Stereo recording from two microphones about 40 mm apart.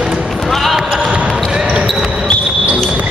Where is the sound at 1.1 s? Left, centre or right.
Right.